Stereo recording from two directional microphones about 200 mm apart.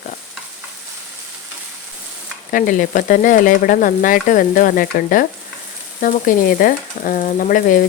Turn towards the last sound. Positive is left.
turn(degrees=45)  # may be behind; listen again after turning